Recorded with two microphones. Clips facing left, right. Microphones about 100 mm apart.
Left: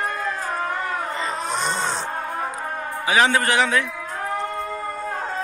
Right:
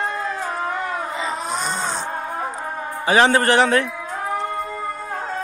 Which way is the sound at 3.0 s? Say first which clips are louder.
Right 3 dB; 35° right (ahead or behind).